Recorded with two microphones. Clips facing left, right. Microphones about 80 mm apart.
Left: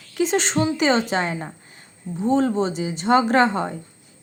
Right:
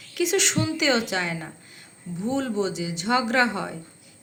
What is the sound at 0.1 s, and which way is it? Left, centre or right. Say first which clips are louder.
A woman's voice: left 3 dB; left.